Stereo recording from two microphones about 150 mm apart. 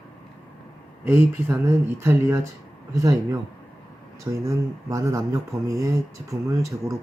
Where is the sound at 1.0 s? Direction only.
15° right (ahead or behind).